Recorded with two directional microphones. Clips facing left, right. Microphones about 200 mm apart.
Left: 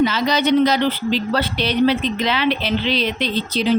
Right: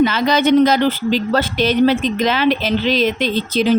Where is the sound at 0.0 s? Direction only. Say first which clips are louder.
Right 3 dB; 55° right (ahead or behind).